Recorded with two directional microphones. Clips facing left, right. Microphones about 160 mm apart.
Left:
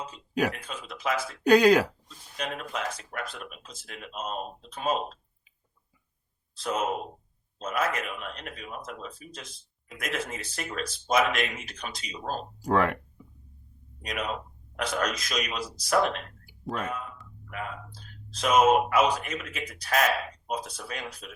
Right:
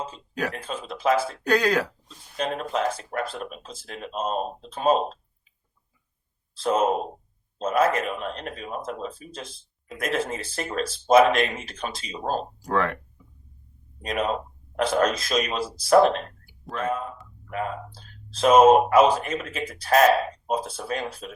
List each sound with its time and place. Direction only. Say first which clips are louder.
0.5 s speech: right 7 dB; 30° right (ahead or behind)
1.5 s speech: left 4 dB; 15° left (ahead or behind)
2.0 s speech: right 6 dB; 35° right (ahead or behind)
6.5 s speech: right 7 dB; 30° right (ahead or behind)
12.6 s speech: left 2 dB; 10° left (ahead or behind)
14.0 s speech: right 7 dB; 30° right (ahead or behind)